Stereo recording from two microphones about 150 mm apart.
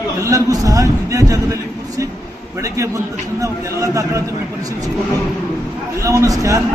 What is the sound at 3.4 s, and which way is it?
Speech, 20° right (ahead or behind).